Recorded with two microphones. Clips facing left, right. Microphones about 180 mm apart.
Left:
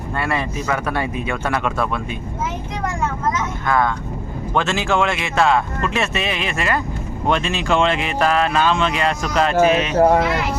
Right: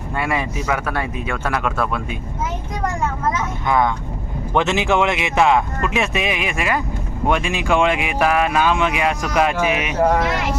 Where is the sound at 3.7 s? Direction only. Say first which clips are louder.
Right 1 dB; 20° right (ahead or behind).